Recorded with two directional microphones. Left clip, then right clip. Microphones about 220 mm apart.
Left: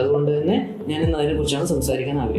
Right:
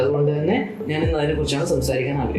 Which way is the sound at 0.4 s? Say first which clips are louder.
Even; 35° left (ahead or behind).